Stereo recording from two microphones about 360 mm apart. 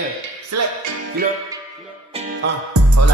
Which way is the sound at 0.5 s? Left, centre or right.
Right.